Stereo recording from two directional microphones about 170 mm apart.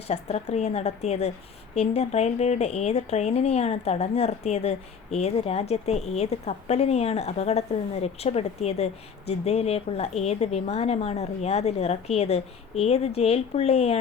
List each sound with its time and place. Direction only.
0.1 s speech: 40° left (ahead or behind)